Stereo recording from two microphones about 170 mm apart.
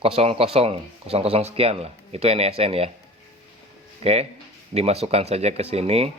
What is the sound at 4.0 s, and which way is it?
Speech, 40° right (ahead or behind).